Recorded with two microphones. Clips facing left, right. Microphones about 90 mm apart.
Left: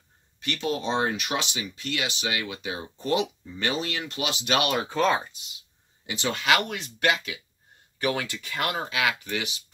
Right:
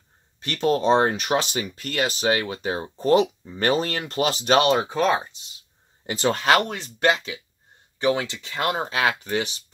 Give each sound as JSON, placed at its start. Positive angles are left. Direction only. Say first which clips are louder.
{"t": 0.4, "sound": "speech", "louder": "right 7 dB", "side_deg": -40}
{"t": 4.8, "sound": "speech", "louder": "right 2 dB", "side_deg": -15}
{"t": 5.3, "sound": "speech", "louder": "left 1 dB", "side_deg": -35}